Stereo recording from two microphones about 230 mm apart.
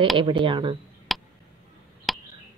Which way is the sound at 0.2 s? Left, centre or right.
Right.